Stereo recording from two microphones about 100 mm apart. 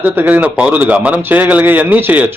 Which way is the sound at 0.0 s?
20° right (ahead or behind).